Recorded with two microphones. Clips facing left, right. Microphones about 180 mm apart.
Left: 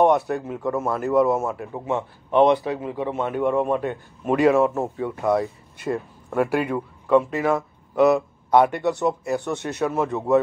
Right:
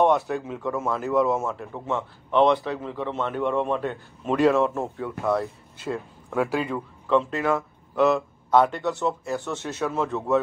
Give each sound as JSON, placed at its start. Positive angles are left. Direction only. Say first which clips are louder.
{"t": 0.0, "sound": "a man's voice", "louder": "left 2 dB", "side_deg": 10}